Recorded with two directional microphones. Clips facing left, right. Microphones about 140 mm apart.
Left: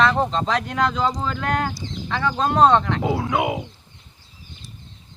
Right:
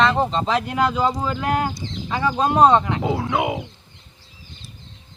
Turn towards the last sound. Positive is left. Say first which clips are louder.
# even
turn(degrees=0)  # may be behind; listen again after turning